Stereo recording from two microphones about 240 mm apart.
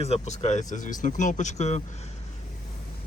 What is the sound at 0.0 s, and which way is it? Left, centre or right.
Speech, left.